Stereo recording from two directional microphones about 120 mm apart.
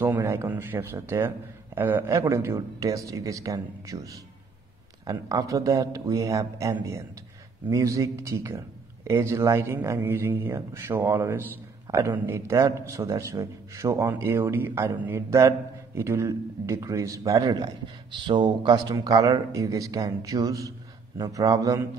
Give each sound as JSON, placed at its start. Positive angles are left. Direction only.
{"t": 0.0, "sound": "a man's voice", "side_deg": -20}